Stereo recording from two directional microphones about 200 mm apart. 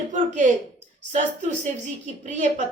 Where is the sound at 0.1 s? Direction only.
40° right (ahead or behind).